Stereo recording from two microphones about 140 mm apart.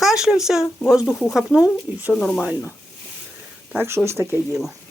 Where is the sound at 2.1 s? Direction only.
5° left (ahead or behind).